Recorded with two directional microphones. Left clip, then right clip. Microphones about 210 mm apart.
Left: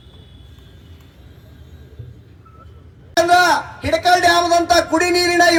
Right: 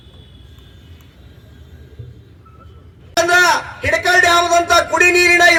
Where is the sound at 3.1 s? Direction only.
55° left (ahead or behind).